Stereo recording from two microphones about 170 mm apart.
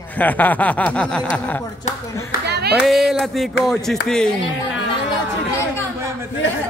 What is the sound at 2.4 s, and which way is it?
Speech, 75° right (ahead or behind).